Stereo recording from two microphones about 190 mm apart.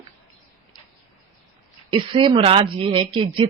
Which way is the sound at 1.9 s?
25° right (ahead or behind).